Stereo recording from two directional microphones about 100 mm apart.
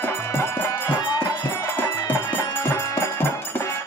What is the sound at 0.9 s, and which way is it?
Music, 40° left (ahead or behind).